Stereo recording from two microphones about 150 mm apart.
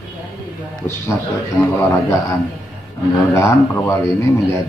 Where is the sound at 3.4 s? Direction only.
20° left (ahead or behind).